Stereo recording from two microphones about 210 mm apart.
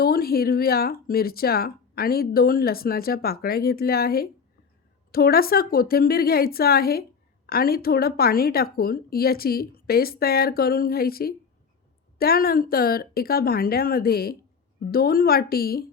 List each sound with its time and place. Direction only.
0.0 s speech: 45° left (ahead or behind)